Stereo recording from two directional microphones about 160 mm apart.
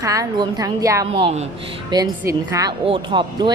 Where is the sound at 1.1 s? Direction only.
40° right (ahead or behind).